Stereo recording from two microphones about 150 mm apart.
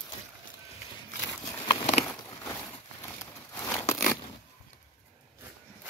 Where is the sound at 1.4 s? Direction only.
30° left (ahead or behind).